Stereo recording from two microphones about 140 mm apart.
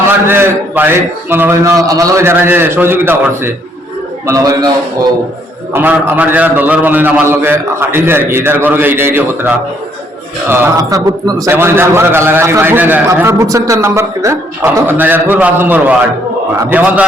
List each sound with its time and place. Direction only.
0.3 s a man's voice: 15° right (ahead or behind)
5.7 s a man's voice: 10° right (ahead or behind)
10.5 s a man's voice: 20° right (ahead or behind)